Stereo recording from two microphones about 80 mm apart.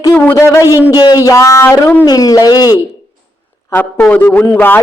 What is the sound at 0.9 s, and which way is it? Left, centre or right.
Speech, left.